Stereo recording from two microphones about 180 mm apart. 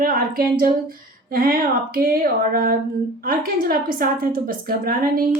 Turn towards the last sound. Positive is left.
turn(degrees=-55)  # may be behind; listen again after turning